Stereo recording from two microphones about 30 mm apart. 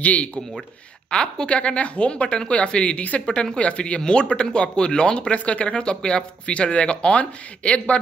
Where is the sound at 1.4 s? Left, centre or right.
Left.